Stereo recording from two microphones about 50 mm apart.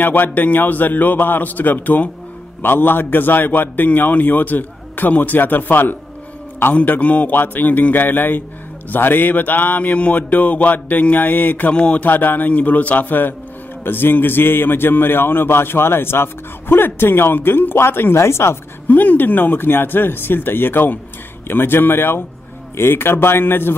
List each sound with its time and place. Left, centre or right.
0.0 s a man's voice: left
6.7 s a man's voice: left
12.1 s a man's voice: left
18.1 s a woman's voice: left
18.9 s a man's voice: left